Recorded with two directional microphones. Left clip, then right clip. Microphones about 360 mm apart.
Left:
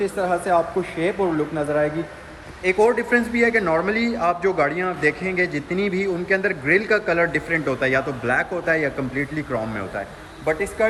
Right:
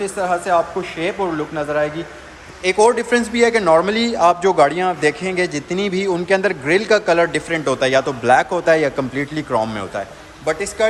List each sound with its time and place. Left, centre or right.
0.0 s a man's voice: centre